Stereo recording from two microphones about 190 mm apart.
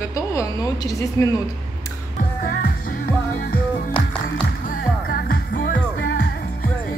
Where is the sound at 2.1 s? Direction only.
50° left (ahead or behind).